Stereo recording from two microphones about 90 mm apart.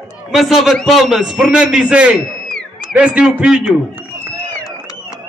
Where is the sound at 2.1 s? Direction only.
5° left (ahead or behind).